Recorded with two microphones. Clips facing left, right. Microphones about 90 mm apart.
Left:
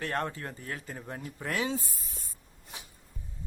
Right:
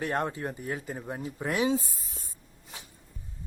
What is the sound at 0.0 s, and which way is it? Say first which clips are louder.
Speech: right 3 dB; 15° right (ahead or behind).